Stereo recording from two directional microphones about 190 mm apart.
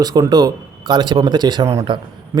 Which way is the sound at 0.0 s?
20° right (ahead or behind).